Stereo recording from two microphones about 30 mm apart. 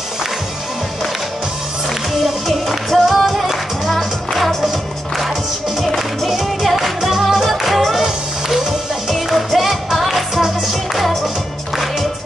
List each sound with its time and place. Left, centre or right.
2.2 s music: centre